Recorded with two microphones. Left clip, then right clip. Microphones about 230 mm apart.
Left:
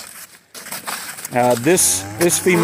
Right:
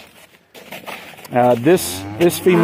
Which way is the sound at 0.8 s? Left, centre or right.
Centre.